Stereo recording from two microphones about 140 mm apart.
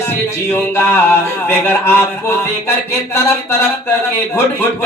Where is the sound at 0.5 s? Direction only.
15° left (ahead or behind).